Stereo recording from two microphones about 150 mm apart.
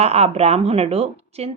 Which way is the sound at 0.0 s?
45° right (ahead or behind).